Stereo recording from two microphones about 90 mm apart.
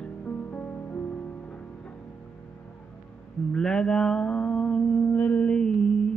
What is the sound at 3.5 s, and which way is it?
Mantra, 10° left (ahead or behind).